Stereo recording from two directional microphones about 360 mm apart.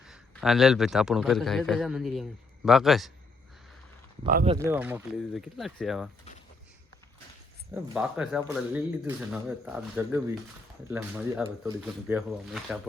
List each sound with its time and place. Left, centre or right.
0.0 s speech: centre
4.3 s speech: right
4.5 s speech: centre
7.7 s speech: centre